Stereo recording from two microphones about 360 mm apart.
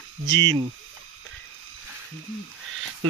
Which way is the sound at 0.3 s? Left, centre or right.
Right.